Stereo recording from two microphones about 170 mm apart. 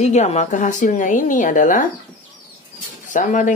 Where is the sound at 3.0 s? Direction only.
50° left (ahead or behind).